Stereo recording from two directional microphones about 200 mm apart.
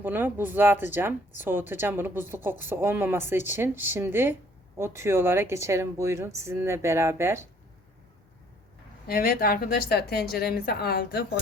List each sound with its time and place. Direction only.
0.0 s a woman's voice: 10° right (ahead or behind)
9.0 s a woman's voice: 45° left (ahead or behind)